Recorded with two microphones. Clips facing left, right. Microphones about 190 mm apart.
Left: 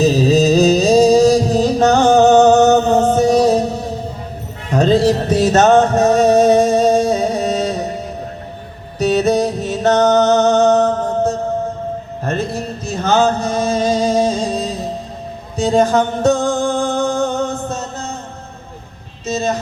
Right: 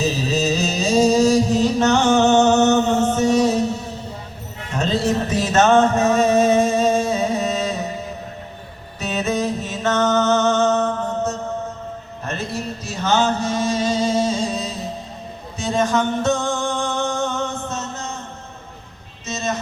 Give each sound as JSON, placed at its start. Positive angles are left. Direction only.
{"t": 0.0, "sound": "music", "side_deg": 35}
{"t": 9.0, "sound": "music", "side_deg": 40}
{"t": 12.5, "sound": "chant", "side_deg": 40}
{"t": 15.5, "sound": "music", "side_deg": 35}
{"t": 19.2, "sound": "vehicle", "side_deg": 35}